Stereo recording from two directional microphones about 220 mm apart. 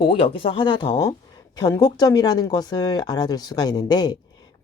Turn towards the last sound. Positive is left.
turn(degrees=20)  # may be behind; listen again after turning